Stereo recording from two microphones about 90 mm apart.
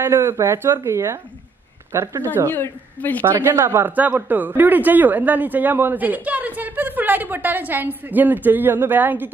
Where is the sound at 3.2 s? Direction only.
25° right (ahead or behind).